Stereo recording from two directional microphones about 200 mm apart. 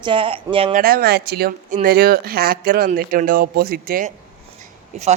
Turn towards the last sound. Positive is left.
turn(degrees=-35)  # may be behind; listen again after turning